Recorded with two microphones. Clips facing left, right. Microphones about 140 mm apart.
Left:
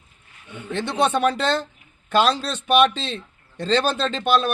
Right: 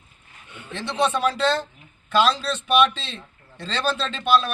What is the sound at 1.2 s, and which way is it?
A man's voice, 55° left (ahead or behind).